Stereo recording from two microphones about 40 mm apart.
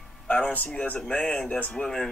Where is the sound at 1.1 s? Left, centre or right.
Left.